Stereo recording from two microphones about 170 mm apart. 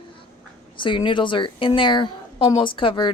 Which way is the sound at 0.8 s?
30° left (ahead or behind).